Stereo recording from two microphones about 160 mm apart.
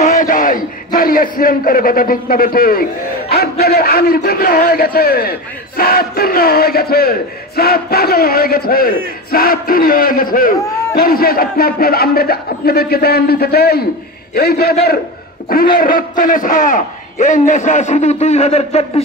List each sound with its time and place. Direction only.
0.0 s a man's voice: 55° left (ahead or behind)